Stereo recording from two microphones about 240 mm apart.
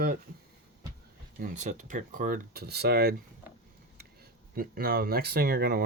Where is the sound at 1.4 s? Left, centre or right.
Right.